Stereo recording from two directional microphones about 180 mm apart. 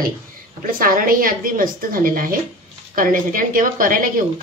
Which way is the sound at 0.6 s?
50° right (ahead or behind).